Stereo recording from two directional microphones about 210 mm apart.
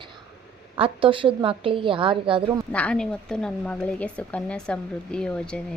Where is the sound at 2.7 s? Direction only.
5° left (ahead or behind).